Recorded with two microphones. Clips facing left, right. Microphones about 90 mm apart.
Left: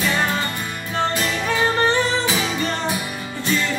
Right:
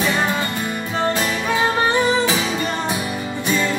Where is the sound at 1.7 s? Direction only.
10° right (ahead or behind).